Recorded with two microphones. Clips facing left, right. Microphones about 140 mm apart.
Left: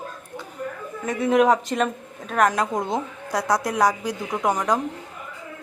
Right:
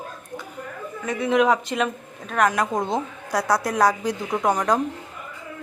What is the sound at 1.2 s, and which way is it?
Speech, 45° left (ahead or behind).